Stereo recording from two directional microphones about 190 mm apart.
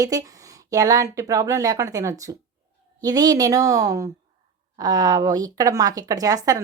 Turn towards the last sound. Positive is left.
turn(degrees=-20)  # may be behind; listen again after turning